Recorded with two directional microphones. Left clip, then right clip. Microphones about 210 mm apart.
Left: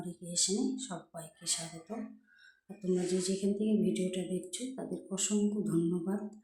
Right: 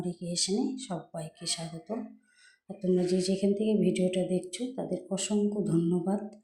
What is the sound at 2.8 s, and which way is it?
Speech, 20° right (ahead or behind).